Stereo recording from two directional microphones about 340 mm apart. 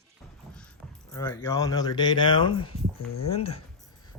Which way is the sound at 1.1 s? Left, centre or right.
Centre.